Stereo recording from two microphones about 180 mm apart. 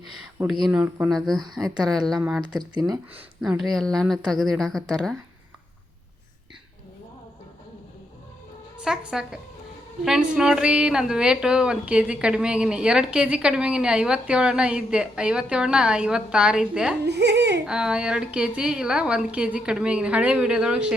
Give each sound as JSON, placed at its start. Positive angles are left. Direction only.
{"t": 0.7, "sound": "speech", "side_deg": -5}
{"t": 2.7, "sound": "speech", "side_deg": -20}
{"t": 3.2, "sound": "speech", "side_deg": -5}
{"t": 8.8, "sound": "speech", "side_deg": -5}
{"t": 17.0, "sound": "speech", "side_deg": -70}
{"t": 17.7, "sound": "speech", "side_deg": -5}